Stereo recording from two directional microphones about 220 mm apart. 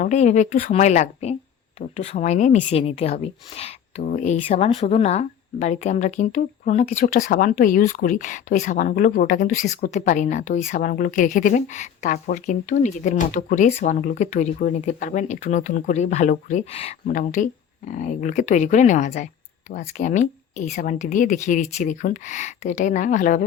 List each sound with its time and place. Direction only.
0.0 s a woman's voice: 30° left (ahead or behind)